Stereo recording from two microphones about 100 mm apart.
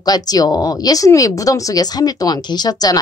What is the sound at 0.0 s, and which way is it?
Speech, 40° left (ahead or behind).